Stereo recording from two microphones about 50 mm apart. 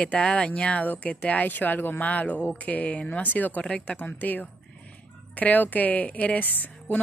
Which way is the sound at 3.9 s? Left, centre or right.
Left.